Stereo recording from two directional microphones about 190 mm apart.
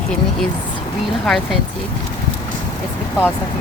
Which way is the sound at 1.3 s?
Centre (ahead or behind).